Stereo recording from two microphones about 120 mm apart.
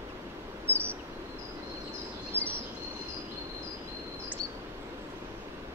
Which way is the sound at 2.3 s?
15° right (ahead or behind).